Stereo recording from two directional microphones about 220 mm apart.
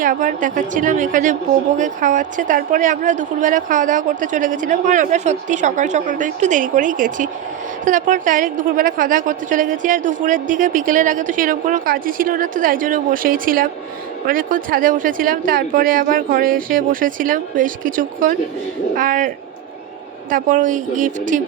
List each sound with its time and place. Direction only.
0.0 s a woman's voice: 40° right (ahead or behind)
20.3 s a woman's voice: 35° right (ahead or behind)